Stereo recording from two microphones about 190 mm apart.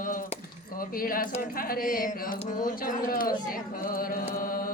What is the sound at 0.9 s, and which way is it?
Speech, 50° left (ahead or behind).